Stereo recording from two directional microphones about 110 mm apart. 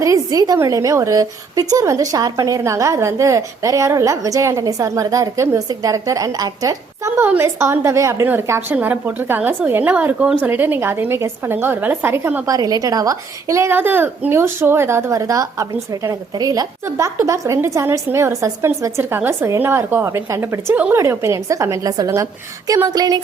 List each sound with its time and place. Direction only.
0.0 s a sound: 30° right (ahead or behind)
0.6 s a woman's voice: 30° right (ahead or behind)
7.2 s a woman's voice: 20° right (ahead or behind)
12.5 s a woman's voice: 35° right (ahead or behind)